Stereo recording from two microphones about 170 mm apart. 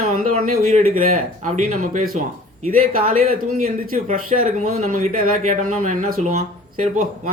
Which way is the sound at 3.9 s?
55° right (ahead or behind).